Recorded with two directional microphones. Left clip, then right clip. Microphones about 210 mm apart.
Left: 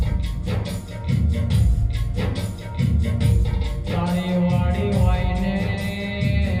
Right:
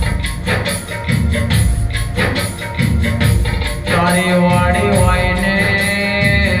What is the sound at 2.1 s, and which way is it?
Music, 15° left (ahead or behind).